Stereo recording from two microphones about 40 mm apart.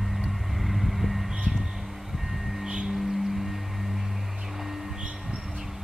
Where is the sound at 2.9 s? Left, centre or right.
Centre.